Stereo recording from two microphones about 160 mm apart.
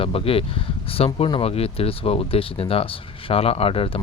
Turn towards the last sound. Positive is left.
turn(degrees=35)  # may be behind; listen again after turning